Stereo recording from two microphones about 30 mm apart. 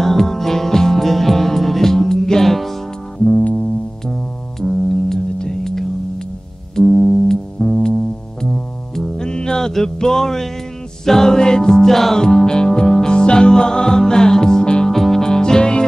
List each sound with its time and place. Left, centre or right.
0.0 s music: centre
4.1 s music: centre
5.4 s a sound: centre
6.8 s music: centre
9.2 s music: left
12.2 s music: left
13.1 s music: left
14.9 s music: centre
15.2 s music: left